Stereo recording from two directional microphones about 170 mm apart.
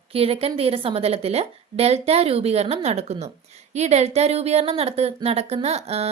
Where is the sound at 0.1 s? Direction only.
35° right (ahead or behind).